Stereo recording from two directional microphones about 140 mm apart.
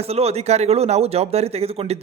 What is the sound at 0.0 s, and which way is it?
Speech, 45° right (ahead or behind).